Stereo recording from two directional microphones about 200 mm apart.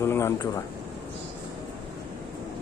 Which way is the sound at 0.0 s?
15° left (ahead or behind).